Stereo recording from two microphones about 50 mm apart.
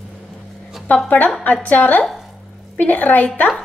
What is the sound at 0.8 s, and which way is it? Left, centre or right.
A woman's voice, left.